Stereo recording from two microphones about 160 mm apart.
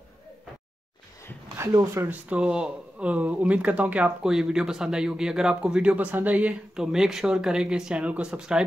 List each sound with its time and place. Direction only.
1.6 s speech: 20° right (ahead or behind)